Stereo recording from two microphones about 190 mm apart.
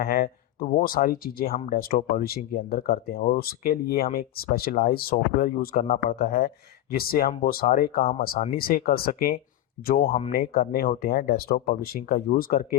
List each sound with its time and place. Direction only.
0.0 s speech: 50° left (ahead or behind)